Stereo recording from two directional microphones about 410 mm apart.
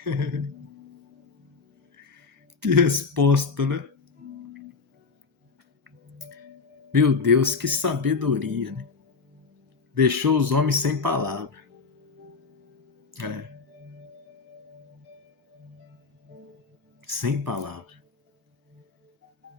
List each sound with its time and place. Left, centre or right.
0.0 s music: right
2.6 s speech: right
6.9 s speech: right
9.9 s speech: right
17.1 s speech: right